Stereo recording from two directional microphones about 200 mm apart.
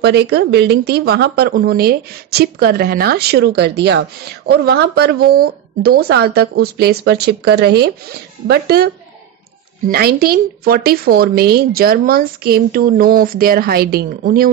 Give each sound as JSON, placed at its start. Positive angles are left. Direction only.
{"t": 0.0, "sound": "speech", "side_deg": -55}